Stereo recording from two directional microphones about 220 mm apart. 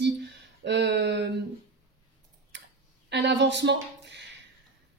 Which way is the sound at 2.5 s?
55° right (ahead or behind).